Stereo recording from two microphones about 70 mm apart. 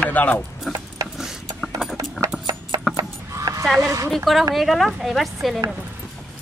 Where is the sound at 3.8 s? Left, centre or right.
Right.